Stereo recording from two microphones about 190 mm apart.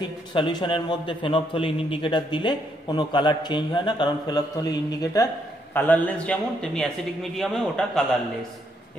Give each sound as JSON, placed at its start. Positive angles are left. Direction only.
{"t": 0.3, "sound": "a man's voice", "side_deg": 25}